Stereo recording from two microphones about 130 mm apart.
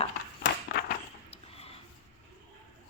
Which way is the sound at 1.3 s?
50° left (ahead or behind).